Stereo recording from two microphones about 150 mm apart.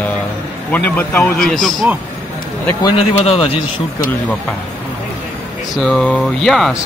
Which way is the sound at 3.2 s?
40° left (ahead or behind).